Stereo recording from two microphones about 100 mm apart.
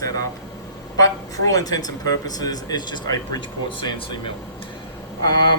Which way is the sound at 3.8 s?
55° left (ahead or behind).